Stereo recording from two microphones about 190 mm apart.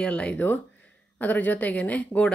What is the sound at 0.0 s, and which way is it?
A woman's voice, 5° left (ahead or behind).